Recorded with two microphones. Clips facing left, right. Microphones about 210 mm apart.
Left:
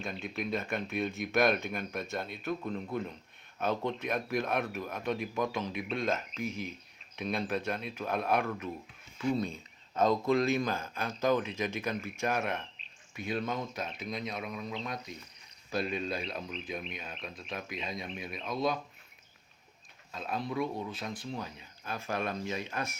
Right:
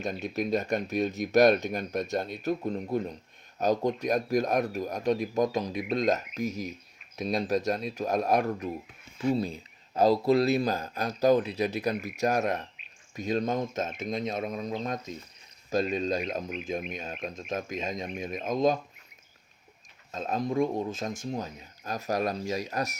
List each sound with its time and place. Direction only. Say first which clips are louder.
0.0 s speech: right 6 dB; 40° right (ahead or behind)
20.1 s speech: right 6 dB; 45° right (ahead or behind)